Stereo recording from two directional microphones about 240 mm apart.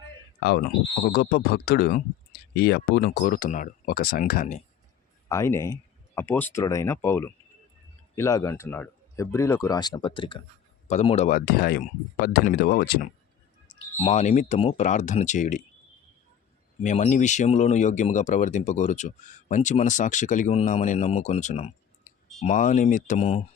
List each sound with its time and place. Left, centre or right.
0.3 s speech: left
5.3 s speech: centre; by 13.1 s left
13.7 s speech: left
16.8 s speech: left